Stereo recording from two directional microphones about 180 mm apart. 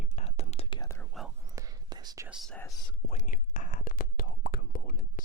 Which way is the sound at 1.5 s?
20° right (ahead or behind).